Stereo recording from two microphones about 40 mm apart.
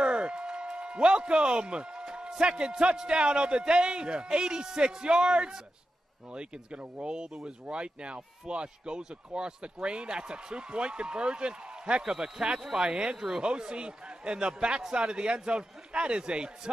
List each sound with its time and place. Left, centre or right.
0.0 s a man's voice: right; by 12.8 s centre
12.8 s speech: right